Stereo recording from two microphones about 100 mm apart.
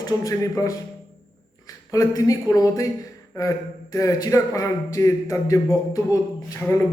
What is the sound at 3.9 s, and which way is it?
A man's voice, 30° left (ahead or behind).